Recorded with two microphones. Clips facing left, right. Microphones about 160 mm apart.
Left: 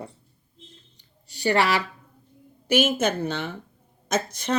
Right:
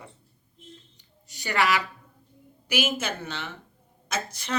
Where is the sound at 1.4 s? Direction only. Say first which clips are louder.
Left 3 dB; 30° left (ahead or behind).